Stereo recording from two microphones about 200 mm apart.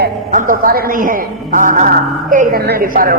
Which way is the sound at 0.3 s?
40° right (ahead or behind).